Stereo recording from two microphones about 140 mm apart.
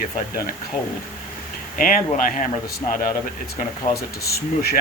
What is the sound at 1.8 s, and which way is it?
Speech, 75° left (ahead or behind).